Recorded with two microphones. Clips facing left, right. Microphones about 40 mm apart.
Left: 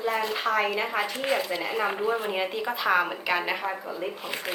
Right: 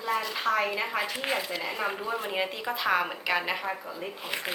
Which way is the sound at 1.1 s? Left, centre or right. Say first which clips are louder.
Left 3 dB; centre.